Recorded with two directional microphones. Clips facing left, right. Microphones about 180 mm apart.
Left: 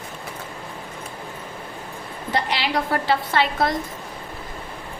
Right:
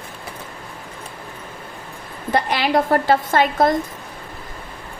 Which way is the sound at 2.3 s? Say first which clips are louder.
Right 5 dB; 50° right (ahead or behind).